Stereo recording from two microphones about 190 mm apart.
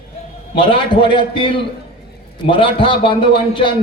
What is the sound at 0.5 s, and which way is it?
A man's voice, 25° left (ahead or behind).